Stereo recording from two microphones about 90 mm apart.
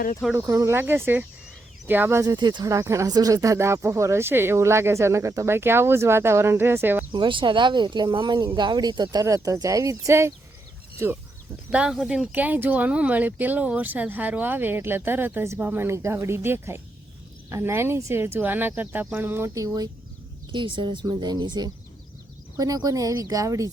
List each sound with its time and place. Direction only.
0.3 s speech: 35° right (ahead or behind)
2.2 s speech: 55° right (ahead or behind)
2.6 s speech: 35° right (ahead or behind)
7.1 s speech: 65° right (ahead or behind); by 9.2 s 50° right (ahead or behind)
9.2 s speech: 40° right (ahead or behind)
11.7 s speech: 10° right (ahead or behind); by 19.5 s 25° right (ahead or behind)
19.5 s speech: 45° right (ahead or behind)
20.5 s speech: 65° right (ahead or behind)
22.5 s speech: 45° right (ahead or behind)